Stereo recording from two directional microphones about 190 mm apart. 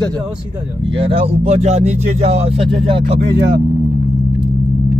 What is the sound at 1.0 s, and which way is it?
Speech, 30° right (ahead or behind).